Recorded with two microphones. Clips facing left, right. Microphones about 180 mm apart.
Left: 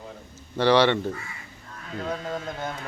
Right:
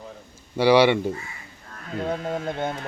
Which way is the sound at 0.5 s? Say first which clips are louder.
Right 3 dB; 10° right (ahead or behind).